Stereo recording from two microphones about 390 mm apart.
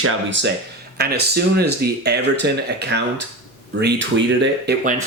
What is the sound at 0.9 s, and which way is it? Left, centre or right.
Speech, right.